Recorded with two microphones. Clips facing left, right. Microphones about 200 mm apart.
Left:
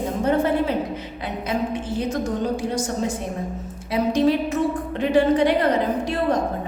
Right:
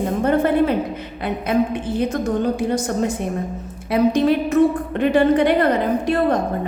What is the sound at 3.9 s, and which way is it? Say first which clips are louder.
A woman's voice: right 3 dB; 60° right (ahead or behind).